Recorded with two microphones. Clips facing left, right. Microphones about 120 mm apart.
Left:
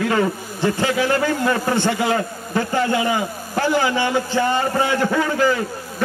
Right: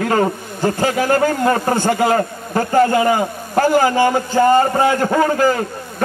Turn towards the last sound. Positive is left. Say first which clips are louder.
# right 4 dB
turn(degrees=-45)  # may be behind; listen again after turning